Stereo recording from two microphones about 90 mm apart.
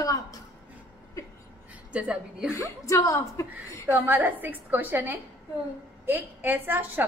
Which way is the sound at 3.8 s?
20° right (ahead or behind).